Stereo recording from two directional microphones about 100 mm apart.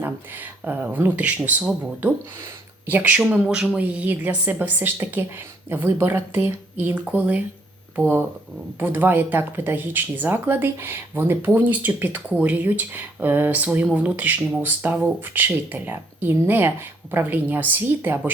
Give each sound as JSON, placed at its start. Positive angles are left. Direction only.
{"t": 0.0, "sound": "a woman's voice", "side_deg": -20}